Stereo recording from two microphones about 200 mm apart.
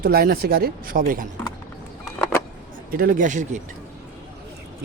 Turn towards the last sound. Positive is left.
turn(degrees=-40)  # may be behind; listen again after turning